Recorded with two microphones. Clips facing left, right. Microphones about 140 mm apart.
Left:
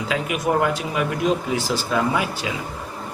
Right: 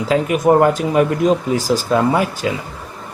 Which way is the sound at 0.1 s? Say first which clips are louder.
Right 9 dB; 40° right (ahead or behind).